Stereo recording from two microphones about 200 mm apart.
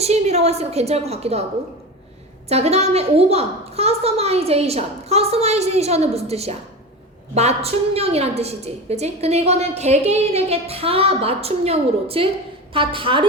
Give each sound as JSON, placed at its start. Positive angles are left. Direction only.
{"t": 0.0, "sound": "a woman's voice", "side_deg": -30}
{"t": 2.5, "sound": "a woman's voice", "side_deg": -30}